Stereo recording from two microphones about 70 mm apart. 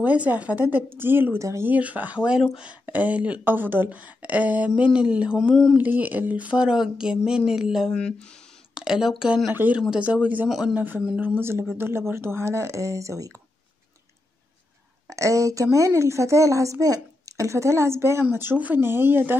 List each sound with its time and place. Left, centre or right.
0.0 s speech: right
1.4 s a woman's voice: right
1.7 s speech: right
5.8 s speech: right; by 7.9 s centre
7.9 s speech: centre
8.7 s speech: centre
9.5 s a woman's voice: right
15.0 s a woman's voice: right